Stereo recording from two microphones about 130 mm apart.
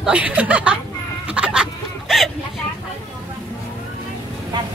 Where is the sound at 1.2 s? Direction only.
10° right (ahead or behind).